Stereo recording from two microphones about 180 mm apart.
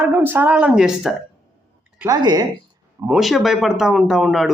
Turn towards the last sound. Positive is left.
turn(degrees=0)  # may be behind; listen again after turning